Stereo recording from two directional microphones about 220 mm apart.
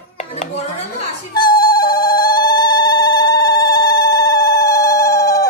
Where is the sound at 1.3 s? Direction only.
20° left (ahead or behind).